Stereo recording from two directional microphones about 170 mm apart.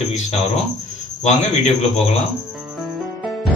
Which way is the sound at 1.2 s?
40° left (ahead or behind).